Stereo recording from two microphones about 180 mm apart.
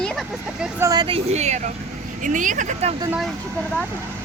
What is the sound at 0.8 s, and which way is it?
Speech, 20° right (ahead or behind).